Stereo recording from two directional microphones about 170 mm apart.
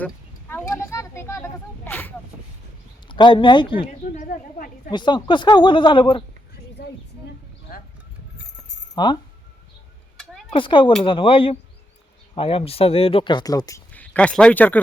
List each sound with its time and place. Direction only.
0.0 s a sound: 10° left (ahead or behind)
3.1 s speech: 30° left (ahead or behind)
4.1 s a woman's voice: 50° left (ahead or behind)
4.9 s speech: 25° left (ahead or behind)
6.8 s a sound: 75° left (ahead or behind)
9.0 s speech: 25° left (ahead or behind)
10.5 s speech: 30° left (ahead or behind)
13.9 s speech: 10° left (ahead or behind)